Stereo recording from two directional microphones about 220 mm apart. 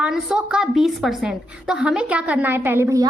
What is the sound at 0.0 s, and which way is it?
A woman's voice, 5° right (ahead or behind).